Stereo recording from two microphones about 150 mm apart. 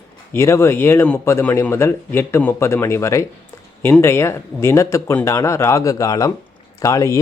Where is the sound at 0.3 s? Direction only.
15° left (ahead or behind).